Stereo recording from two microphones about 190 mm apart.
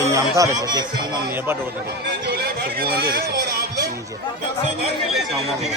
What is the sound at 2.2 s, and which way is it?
Speech, 55° right (ahead or behind).